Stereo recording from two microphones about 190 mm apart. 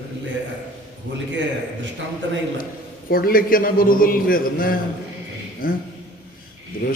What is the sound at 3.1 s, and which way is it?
A man's voice, 50° left (ahead or behind).